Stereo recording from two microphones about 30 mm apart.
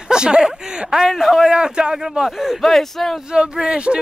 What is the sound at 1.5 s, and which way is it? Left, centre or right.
Speech, right.